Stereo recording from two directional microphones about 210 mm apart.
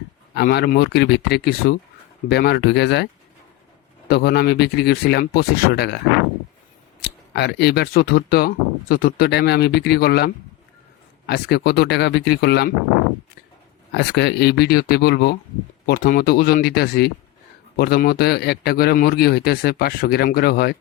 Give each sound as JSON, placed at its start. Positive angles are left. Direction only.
{"t": 0.3, "sound": "speech", "side_deg": 50}
{"t": 4.1, "sound": "speech", "side_deg": 50}
{"t": 7.0, "sound": "speech", "side_deg": 50}
{"t": 13.9, "sound": "speech", "side_deg": 50}